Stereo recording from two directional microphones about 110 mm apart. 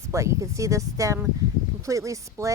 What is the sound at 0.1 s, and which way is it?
Speech, 30° right (ahead or behind).